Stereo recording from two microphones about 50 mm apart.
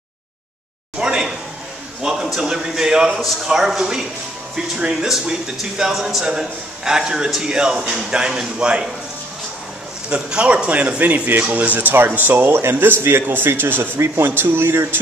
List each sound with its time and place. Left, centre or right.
0.9 s a sound: centre
2.4 s speech: centre
10.0 s speech: right
11.9 s speech: right
13.0 s speech: right
13.9 s speech: right